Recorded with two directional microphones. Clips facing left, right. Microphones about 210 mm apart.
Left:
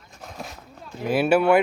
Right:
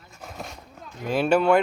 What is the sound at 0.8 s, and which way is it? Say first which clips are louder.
Speech: left 2 dB; 5° left (ahead or behind).